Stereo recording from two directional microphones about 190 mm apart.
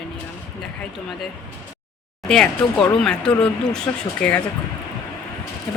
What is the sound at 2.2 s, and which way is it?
Speech, 5° left (ahead or behind).